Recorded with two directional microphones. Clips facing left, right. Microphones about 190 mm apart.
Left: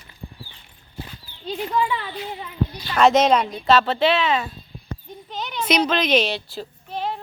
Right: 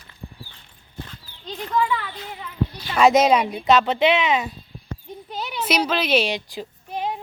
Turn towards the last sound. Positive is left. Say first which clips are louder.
# even
turn(degrees=-15)  # may be behind; listen again after turning